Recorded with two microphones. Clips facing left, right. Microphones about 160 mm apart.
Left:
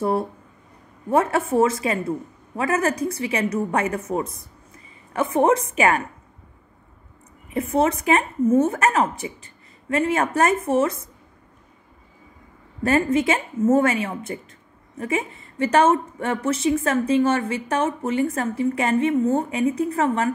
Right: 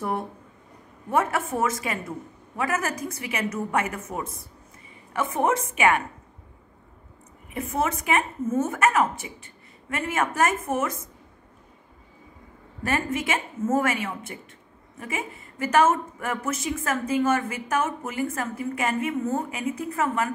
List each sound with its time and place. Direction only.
1.1 s speech: 30° left (ahead or behind)
7.7 s speech: 35° left (ahead or behind)
12.8 s speech: 35° left (ahead or behind)